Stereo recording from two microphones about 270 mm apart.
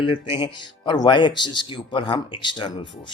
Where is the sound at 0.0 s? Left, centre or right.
Centre.